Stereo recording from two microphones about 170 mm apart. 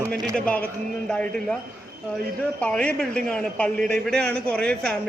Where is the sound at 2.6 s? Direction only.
5° left (ahead or behind).